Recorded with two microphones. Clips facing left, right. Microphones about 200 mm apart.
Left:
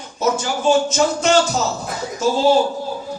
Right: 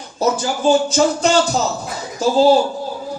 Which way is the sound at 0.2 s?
35° right (ahead or behind).